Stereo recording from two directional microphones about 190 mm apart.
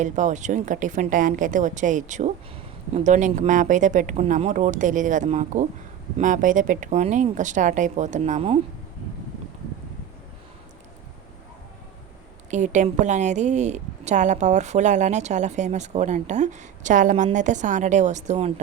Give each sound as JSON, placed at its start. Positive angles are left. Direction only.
{"t": 0.0, "sound": "a woman's voice", "side_deg": -40}
{"t": 12.5, "sound": "a woman's voice", "side_deg": -40}